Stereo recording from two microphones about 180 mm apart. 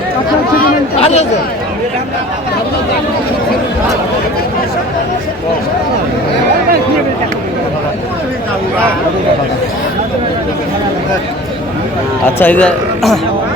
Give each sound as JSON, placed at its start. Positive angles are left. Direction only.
{"t": 0.9, "sound": "speech", "side_deg": 35}
{"t": 12.4, "sound": "speech", "side_deg": 10}